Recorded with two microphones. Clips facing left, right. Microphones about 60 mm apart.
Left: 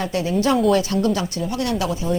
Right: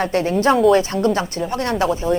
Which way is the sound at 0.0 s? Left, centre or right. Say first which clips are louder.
Right 3 dB; right.